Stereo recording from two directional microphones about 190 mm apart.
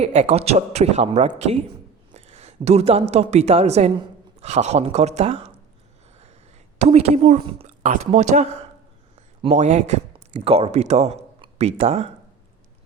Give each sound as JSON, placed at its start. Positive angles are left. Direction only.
{"t": 0.0, "sound": "a woman's voice", "side_deg": -35}
{"t": 6.7, "sound": "a woman's voice", "side_deg": -35}
{"t": 9.5, "sound": "speech", "side_deg": -35}